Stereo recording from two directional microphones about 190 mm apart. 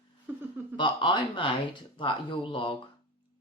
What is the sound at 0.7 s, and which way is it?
Speech, 25° left (ahead or behind).